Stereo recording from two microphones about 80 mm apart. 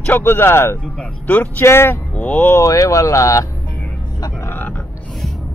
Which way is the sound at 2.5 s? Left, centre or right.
Left.